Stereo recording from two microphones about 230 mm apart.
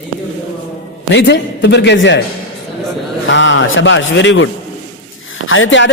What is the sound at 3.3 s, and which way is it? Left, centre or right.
A man's voice, left.